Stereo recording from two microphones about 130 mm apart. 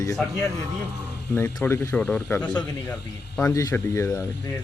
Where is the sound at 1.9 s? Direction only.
5° left (ahead or behind).